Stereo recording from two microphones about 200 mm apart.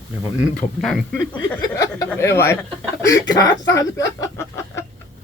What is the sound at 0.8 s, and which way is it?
Speech, centre (ahead or behind).